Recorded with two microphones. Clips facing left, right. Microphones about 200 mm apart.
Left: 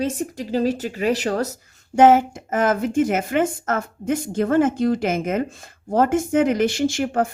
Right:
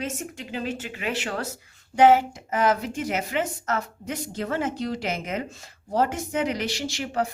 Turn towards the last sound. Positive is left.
turn(degrees=50)  # may be behind; listen again after turning